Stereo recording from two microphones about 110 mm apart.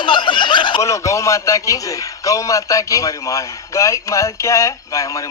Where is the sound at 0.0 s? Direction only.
45° left (ahead or behind).